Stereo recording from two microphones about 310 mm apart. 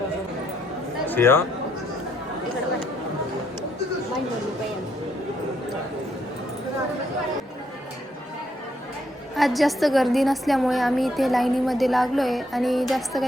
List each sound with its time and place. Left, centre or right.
1.0 s speech: centre
9.3 s a woman's voice: centre